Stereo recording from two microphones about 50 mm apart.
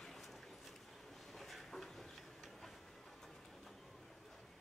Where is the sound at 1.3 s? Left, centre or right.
Centre.